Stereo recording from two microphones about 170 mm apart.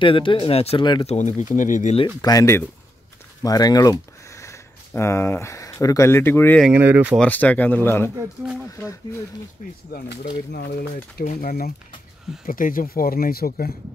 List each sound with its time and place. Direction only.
0.0 s speech: 30° left (ahead or behind)
1.1 s speech: 45° left (ahead or behind)
2.2 s speech: 20° left (ahead or behind)
6.7 s speech: 10° right (ahead or behind)
7.2 s speech: 10° left (ahead or behind)
9.9 s speech: 60° left (ahead or behind)
11.2 s speech: 60° left (ahead or behind)